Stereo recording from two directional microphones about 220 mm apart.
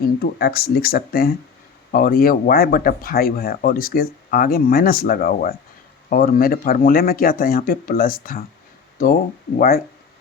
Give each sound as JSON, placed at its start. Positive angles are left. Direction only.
{"t": 0.2, "sound": "speech", "side_deg": 45}